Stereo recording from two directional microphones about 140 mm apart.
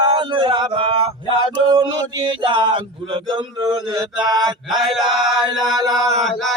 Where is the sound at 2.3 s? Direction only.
35° right (ahead or behind).